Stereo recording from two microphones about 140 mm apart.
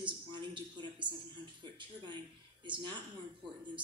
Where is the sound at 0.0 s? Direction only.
35° right (ahead or behind).